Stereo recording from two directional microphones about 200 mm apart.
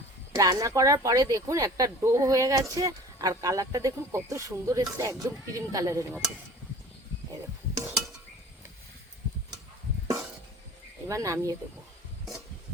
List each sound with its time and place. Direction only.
0.3 s speech: 15° right (ahead or behind)
11.1 s speech: 15° right (ahead or behind)